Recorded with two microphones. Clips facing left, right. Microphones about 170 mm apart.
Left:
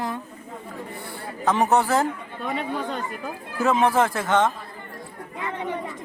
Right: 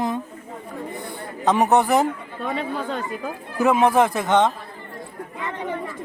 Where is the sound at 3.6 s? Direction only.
15° right (ahead or behind).